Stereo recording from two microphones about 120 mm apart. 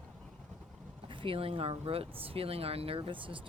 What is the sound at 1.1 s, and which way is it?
Speech, 45° right (ahead or behind).